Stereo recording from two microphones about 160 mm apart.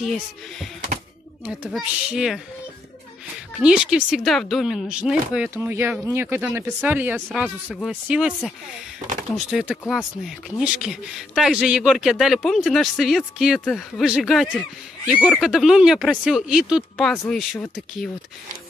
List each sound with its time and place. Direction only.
0.0 s a man's voice: centre (ahead or behind)
1.7 s a man's voice: 5° right (ahead or behind)
3.5 s speech: 5° right (ahead or behind)
7.2 s a man's voice: centre (ahead or behind)
9.5 s a man's voice: centre (ahead or behind)